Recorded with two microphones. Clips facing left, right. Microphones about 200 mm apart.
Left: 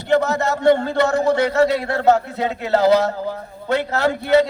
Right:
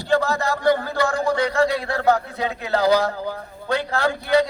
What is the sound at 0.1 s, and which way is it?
A man's voice, 20° left (ahead or behind).